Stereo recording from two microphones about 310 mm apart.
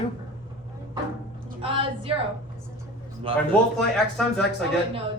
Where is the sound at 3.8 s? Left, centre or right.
Centre.